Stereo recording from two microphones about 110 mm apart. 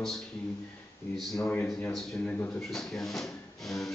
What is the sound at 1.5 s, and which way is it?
Speech, 15° left (ahead or behind).